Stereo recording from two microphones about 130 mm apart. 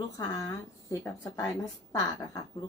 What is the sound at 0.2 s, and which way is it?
A woman's voice, 25° left (ahead or behind).